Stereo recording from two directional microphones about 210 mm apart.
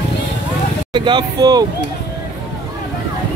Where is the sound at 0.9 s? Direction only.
20° right (ahead or behind).